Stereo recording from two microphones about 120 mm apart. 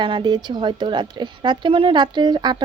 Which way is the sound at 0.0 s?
40° right (ahead or behind).